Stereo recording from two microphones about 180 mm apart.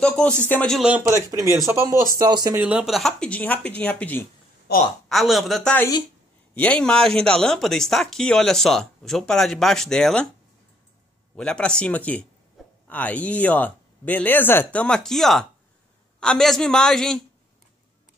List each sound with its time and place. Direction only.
0.0 s speech: 5° left (ahead or behind)
1.0 s speech: 15° right (ahead or behind)
2.5 s speech: 5° right (ahead or behind); by 4.3 s 10° left (ahead or behind)
4.7 s a woman's voice: 65° left (ahead or behind)
5.1 s speech: centre (ahead or behind)
11.3 s speech: 5° left (ahead or behind)